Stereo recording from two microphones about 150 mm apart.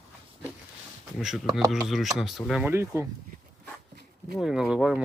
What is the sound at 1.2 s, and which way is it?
Speech, centre (ahead or behind).